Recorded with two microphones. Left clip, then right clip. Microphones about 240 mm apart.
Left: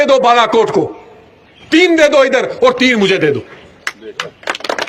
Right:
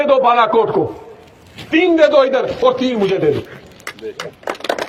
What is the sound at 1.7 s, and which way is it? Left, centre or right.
A man's voice, left.